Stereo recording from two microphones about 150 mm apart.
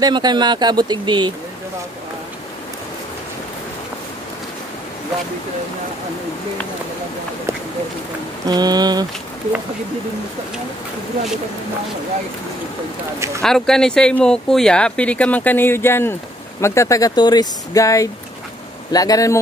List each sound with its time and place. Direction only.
0.0 s speech: 30° right (ahead or behind)
8.5 s speech: 25° right (ahead or behind)
13.4 s speech: 5° left (ahead or behind); by 19.3 s 25° left (ahead or behind)